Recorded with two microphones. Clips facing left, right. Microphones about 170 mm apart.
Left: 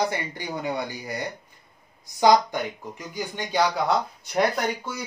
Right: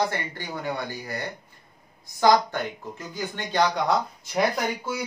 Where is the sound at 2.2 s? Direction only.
15° left (ahead or behind); by 5.0 s 5° right (ahead or behind).